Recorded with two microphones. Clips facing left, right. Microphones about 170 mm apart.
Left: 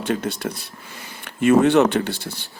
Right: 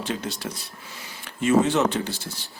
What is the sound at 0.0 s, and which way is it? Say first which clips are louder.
Speech: left 6 dB; 55° left (ahead or behind).